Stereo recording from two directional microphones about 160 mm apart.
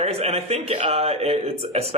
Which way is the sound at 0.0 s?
40° right (ahead or behind).